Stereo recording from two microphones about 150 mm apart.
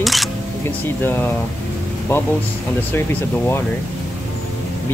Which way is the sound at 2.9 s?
15° left (ahead or behind).